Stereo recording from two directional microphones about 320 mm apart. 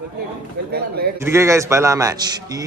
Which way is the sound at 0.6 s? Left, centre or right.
Right.